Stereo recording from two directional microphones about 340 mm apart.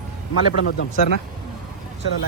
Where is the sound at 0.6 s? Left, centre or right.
Left.